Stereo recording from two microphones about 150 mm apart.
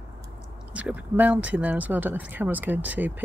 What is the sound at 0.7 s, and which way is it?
Speech, 10° right (ahead or behind).